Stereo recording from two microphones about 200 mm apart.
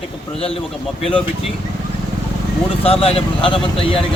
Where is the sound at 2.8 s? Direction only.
30° left (ahead or behind).